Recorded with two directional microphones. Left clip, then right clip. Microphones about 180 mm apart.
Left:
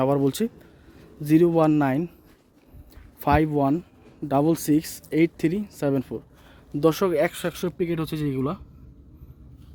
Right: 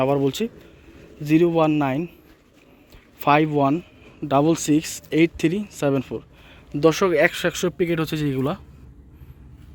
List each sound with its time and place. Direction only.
0.0 s a man's voice: 25° left (ahead or behind)
3.2 s speech: 20° left (ahead or behind); by 8.6 s centre (ahead or behind)